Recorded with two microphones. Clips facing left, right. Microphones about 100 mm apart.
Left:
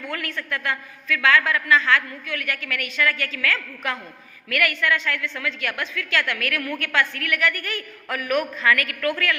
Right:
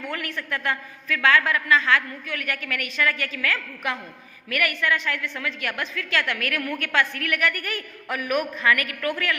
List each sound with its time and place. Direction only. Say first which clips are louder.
0.1 s a woman's voice: left 2 dB; 20° right (ahead or behind)